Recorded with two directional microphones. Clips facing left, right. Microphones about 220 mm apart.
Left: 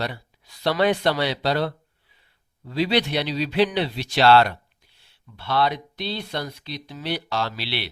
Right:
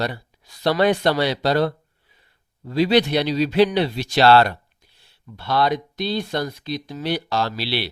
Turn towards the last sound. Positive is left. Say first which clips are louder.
# right 4 dB
turn(degrees=-35)  # may be behind; listen again after turning